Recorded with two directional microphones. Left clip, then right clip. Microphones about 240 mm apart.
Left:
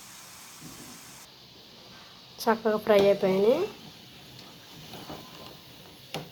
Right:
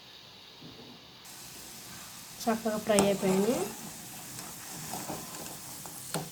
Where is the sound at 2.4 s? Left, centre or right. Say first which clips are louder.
Left 6 dB; centre.